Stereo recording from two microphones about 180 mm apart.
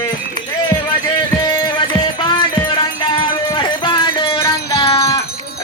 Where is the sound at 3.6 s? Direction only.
25° left (ahead or behind).